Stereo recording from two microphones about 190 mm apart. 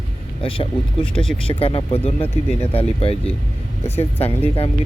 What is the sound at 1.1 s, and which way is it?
Speech, 5° left (ahead or behind).